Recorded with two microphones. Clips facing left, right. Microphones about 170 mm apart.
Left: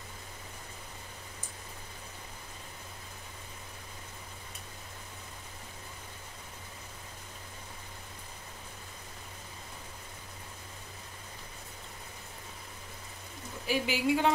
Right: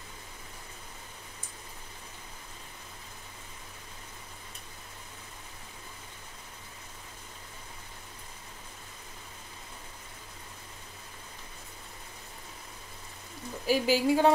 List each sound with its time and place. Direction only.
13.7 s speech: 40° right (ahead or behind)